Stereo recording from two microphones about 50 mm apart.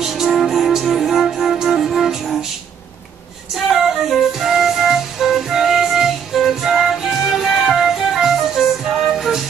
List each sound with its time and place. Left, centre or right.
0.0 s music: centre
3.6 s flute: centre
7.6 s music: centre